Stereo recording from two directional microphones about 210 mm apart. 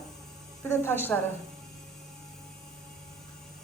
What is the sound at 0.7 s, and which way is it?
Speech, 10° left (ahead or behind).